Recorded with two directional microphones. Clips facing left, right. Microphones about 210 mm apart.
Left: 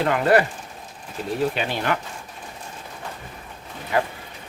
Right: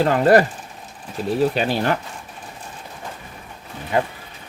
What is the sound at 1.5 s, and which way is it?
Speech, 35° right (ahead or behind).